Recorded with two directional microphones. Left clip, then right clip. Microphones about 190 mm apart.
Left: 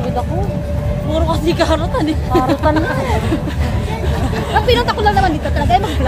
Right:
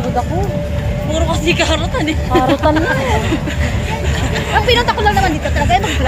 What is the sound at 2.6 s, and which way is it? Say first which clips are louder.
Speech: right 1 dB; 55° right (ahead or behind).